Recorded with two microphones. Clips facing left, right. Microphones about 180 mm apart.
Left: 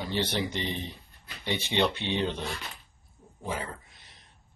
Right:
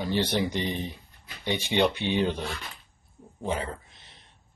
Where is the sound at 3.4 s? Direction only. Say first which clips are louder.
Right 4 dB; 25° right (ahead or behind).